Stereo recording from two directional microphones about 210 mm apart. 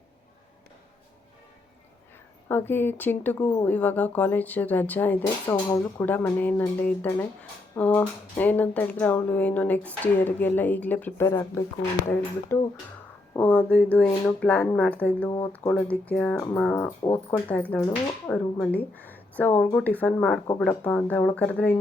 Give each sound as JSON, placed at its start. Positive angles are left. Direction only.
{"t": 2.5, "sound": "speech", "side_deg": 10}